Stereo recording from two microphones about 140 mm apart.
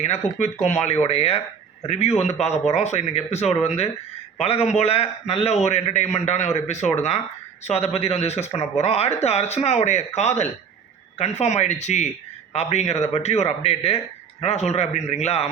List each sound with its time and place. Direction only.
0.0 s a man's voice: 55° left (ahead or behind)